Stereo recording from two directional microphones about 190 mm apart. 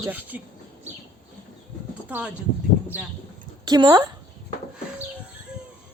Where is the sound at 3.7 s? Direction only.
20° right (ahead or behind).